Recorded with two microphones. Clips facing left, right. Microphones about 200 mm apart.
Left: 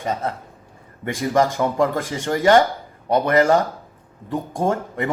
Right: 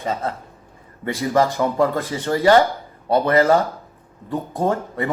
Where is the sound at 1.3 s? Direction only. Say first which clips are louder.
Even; 15° left (ahead or behind).